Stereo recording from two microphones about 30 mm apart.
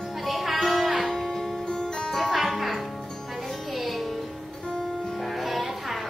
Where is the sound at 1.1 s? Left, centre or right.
Centre.